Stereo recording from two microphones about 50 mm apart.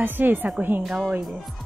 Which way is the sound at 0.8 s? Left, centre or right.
Centre.